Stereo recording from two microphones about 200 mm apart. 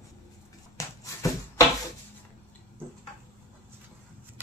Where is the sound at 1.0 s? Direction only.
15° left (ahead or behind).